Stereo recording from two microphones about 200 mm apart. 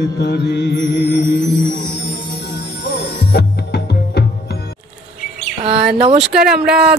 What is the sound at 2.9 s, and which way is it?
Music, 55° left (ahead or behind).